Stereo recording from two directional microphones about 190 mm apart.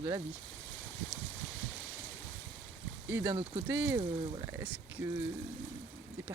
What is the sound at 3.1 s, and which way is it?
Speech, 10° right (ahead or behind).